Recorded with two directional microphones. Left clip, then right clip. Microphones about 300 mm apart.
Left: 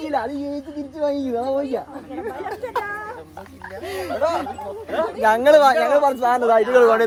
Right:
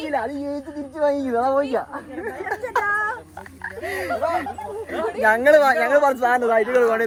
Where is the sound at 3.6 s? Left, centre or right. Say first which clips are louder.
Right 2 dB; centre.